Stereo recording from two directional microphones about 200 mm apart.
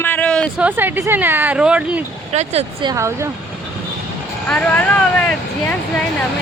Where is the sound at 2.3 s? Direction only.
30° right (ahead or behind).